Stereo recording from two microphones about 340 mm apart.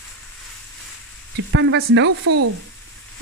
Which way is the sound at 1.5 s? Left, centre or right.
Right.